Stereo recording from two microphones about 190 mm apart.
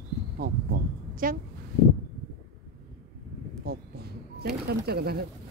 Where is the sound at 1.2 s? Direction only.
45° right (ahead or behind).